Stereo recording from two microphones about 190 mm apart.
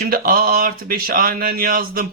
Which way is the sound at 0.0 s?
50° right (ahead or behind).